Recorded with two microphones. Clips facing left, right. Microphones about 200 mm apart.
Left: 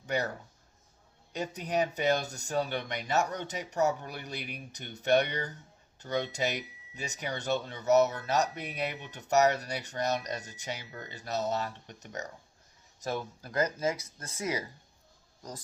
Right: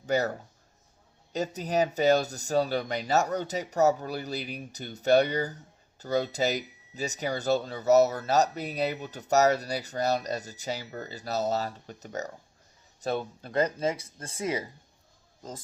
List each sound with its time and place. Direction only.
0.0 s speech: 35° right (ahead or behind)